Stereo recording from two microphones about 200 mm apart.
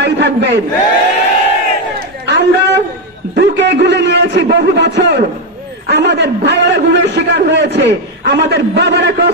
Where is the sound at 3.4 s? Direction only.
60° right (ahead or behind).